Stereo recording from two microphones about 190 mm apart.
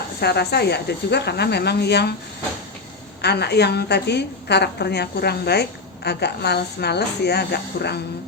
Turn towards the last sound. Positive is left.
turn(degrees=60)  # may be behind; listen again after turning